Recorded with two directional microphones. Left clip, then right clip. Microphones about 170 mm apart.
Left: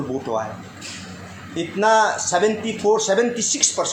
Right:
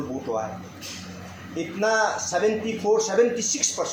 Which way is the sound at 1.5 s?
40° left (ahead or behind).